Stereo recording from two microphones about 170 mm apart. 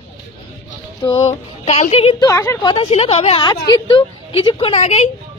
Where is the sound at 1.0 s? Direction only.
30° left (ahead or behind).